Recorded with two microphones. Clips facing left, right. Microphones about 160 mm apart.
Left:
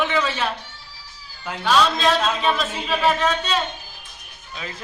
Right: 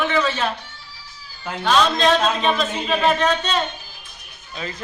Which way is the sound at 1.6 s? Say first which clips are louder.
Right 1 dB; 5° left (ahead or behind).